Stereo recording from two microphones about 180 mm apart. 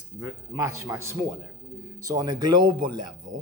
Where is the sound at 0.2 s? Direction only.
20° right (ahead or behind).